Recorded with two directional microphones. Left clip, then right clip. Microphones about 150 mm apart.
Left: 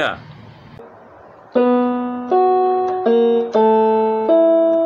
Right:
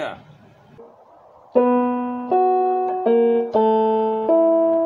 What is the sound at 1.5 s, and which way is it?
Music, 25° left (ahead or behind).